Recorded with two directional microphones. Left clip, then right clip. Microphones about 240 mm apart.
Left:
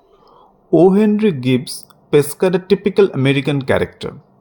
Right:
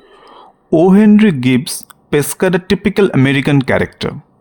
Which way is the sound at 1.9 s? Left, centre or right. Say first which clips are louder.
Left 2 dB; right.